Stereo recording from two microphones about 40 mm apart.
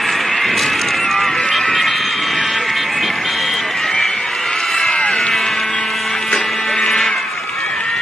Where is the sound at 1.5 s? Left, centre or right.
Centre.